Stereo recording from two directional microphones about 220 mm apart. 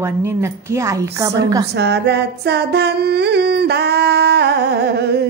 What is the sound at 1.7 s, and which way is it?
Singing, 50° right (ahead or behind).